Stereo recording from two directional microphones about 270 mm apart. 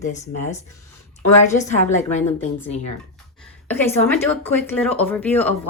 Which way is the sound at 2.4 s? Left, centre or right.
Left.